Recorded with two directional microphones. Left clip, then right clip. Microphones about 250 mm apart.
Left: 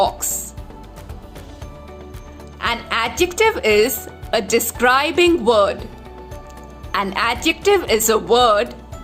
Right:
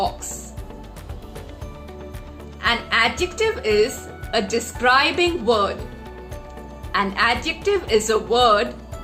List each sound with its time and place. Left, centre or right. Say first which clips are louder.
2.6 s speech: right 1 dB; left
6.9 s a woman's voice: even; left